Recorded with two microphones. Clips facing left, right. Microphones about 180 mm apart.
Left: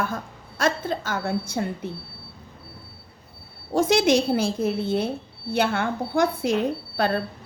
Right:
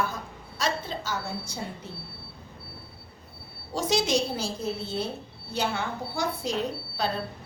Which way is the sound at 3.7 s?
55° left (ahead or behind).